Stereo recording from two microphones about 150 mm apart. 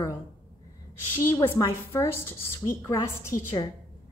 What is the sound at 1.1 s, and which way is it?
A woman's voice, 15° left (ahead or behind).